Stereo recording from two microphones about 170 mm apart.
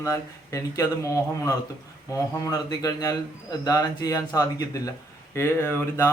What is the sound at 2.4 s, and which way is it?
A man's voice, 20° left (ahead or behind).